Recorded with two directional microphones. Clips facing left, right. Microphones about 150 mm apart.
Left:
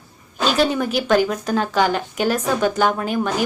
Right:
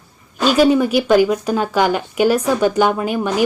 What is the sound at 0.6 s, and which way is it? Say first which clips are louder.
A woman's voice: right 8 dB; 10° right (ahead or behind).